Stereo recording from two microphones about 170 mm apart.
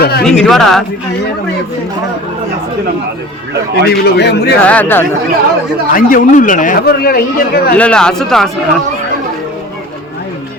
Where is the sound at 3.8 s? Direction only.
75° left (ahead or behind).